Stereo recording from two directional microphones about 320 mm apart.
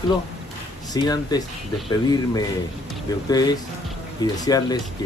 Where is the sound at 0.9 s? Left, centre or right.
Centre.